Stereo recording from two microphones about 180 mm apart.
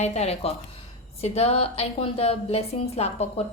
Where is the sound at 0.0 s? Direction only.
35° left (ahead or behind).